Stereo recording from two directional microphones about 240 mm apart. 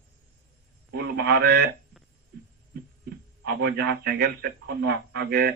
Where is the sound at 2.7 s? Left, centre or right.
Right.